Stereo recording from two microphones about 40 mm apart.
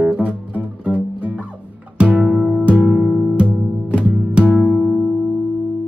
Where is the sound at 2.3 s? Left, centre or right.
Centre.